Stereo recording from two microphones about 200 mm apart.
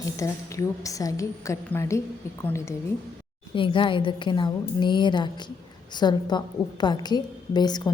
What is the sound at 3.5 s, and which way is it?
A woman's voice, 25° left (ahead or behind).